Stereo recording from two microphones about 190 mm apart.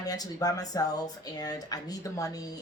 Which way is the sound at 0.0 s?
20° left (ahead or behind).